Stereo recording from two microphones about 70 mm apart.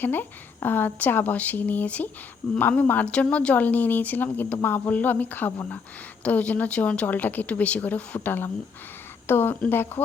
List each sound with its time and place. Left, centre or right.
0.0 s a woman's voice: left